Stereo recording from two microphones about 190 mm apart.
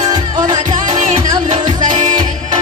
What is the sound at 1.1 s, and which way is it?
Music, 40° right (ahead or behind).